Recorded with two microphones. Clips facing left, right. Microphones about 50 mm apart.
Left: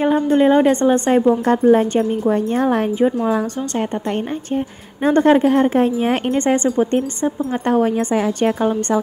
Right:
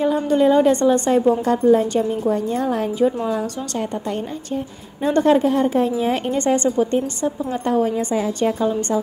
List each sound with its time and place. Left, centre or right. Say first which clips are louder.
0.0 s a woman's voice: left 2 dB; left
1.7 s speech: left 1 dB; left
5.1 s a woman's voice: left 3 dB; left
6.3 s a woman's voice: even; left
7.6 s a woman's voice: left 3 dB; left